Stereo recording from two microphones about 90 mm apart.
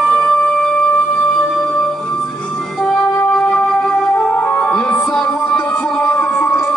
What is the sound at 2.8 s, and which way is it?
Music, 15° left (ahead or behind).